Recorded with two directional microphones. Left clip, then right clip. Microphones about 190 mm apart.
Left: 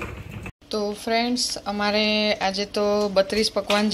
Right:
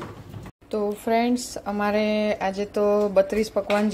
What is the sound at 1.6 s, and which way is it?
A woman's voice, 15° right (ahead or behind).